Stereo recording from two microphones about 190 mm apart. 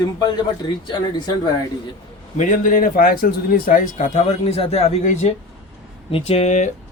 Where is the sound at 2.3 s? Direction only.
45° left (ahead or behind).